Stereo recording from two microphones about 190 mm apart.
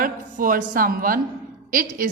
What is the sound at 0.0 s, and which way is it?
A woman's voice, 45° right (ahead or behind).